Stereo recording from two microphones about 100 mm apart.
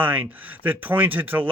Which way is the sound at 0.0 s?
20° right (ahead or behind).